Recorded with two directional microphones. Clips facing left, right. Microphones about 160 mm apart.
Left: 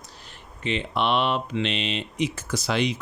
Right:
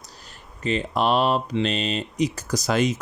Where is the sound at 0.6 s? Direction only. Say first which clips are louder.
Right 3 dB; 40° right (ahead or behind).